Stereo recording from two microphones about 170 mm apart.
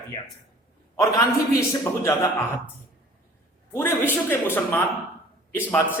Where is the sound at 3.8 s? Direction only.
10° left (ahead or behind).